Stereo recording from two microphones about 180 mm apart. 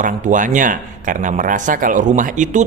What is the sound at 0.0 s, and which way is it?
Speech, 45° right (ahead or behind).